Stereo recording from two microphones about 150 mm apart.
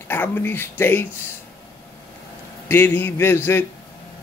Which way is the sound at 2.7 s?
15° left (ahead or behind).